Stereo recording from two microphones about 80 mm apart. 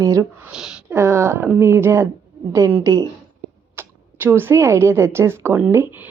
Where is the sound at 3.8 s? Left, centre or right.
Right.